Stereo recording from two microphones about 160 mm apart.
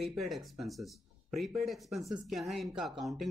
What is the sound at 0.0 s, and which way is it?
Speech, centre (ahead or behind).